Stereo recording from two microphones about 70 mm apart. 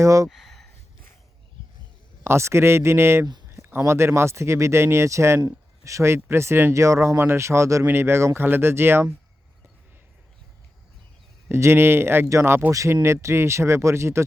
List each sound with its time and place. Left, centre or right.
0.0 s speech: right
0.3 s a sound: centre
2.2 s speech: right
11.6 s speech: right